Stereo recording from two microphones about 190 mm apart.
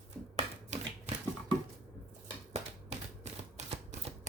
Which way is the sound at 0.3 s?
35° right (ahead or behind).